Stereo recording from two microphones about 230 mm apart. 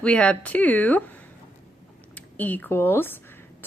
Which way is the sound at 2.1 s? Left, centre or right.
Centre.